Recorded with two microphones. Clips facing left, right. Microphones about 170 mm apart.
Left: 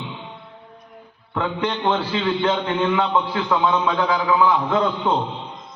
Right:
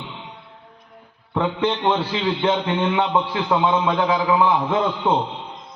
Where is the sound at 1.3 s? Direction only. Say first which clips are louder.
Right 2 dB; 20° right (ahead or behind).